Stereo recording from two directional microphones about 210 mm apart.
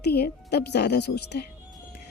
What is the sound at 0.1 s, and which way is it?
Speech, 50° left (ahead or behind).